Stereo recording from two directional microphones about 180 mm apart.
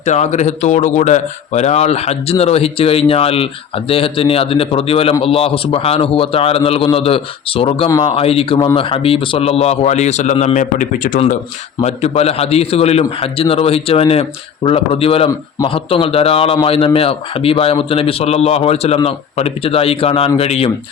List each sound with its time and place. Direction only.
0.0 s speech: 40° left (ahead or behind)
7.9 s speech: 20° left (ahead or behind)
8.1 s speech: 30° left (ahead or behind); by 11.2 s 50° left (ahead or behind)
11.8 s speech: 35° left (ahead or behind)
15.3 s a man's voice: 20° left (ahead or behind)
15.7 s speech: 30° left (ahead or behind)